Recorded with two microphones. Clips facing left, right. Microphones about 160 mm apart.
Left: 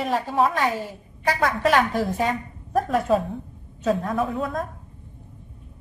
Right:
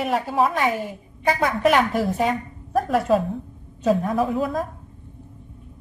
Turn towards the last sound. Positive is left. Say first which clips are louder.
# right 3 dB
turn(degrees=0)  # may be behind; listen again after turning